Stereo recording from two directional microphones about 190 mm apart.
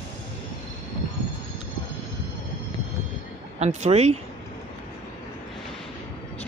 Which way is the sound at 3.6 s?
35° right (ahead or behind).